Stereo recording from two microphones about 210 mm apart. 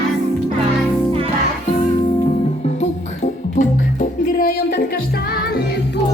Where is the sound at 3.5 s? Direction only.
40° left (ahead or behind).